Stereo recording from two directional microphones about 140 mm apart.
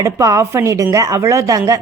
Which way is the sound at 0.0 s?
25° right (ahead or behind).